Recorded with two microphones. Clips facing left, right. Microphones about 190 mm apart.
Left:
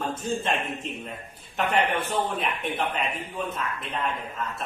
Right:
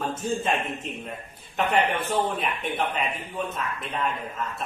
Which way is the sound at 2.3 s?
Centre (ahead or behind).